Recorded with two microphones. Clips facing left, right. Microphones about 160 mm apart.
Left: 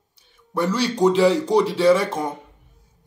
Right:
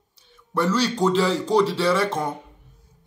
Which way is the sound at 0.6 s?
10° left (ahead or behind).